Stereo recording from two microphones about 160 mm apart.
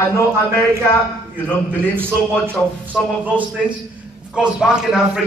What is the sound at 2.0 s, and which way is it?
Speech, 15° right (ahead or behind).